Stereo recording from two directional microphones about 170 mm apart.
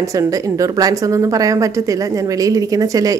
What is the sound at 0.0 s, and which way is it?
A woman's voice, 20° right (ahead or behind).